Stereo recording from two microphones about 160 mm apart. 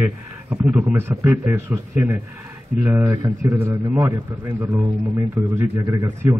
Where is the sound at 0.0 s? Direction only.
10° right (ahead or behind).